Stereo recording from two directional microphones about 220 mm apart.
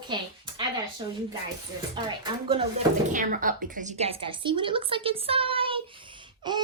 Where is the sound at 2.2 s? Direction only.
20° right (ahead or behind).